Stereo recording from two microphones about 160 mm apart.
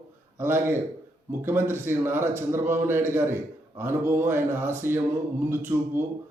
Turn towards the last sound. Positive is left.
turn(degrees=-15)  # may be behind; listen again after turning